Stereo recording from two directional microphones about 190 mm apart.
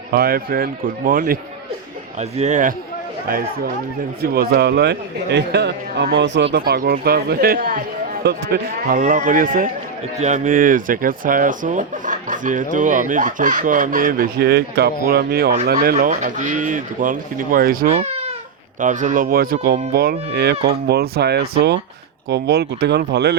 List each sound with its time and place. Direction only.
0.1 s speech: 55° right (ahead or behind)
2.4 s a man's voice: 40° right (ahead or behind)
3.2 s a man's voice: 50° right (ahead or behind)